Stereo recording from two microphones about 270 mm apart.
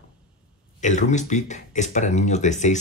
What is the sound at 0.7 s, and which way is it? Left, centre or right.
Speech, left.